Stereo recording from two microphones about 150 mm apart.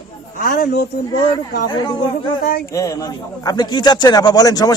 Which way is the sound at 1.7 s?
30° left (ahead or behind).